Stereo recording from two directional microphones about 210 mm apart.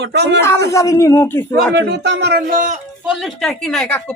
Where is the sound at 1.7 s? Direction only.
55° right (ahead or behind).